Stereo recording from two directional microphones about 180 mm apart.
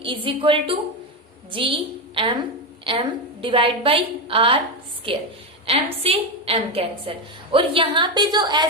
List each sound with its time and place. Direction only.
0.0 s a woman's voice: 30° right (ahead or behind)
3.4 s a woman's voice: 30° right (ahead or behind)